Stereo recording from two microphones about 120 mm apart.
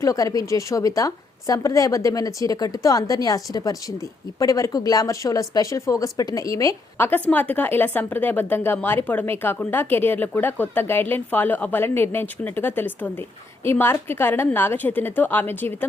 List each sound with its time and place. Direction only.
0.0 s a woman's voice: 30° left (ahead or behind)